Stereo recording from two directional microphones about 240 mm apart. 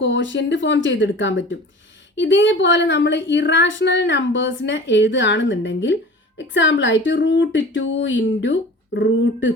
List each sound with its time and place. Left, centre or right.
0.0 s a woman's voice: left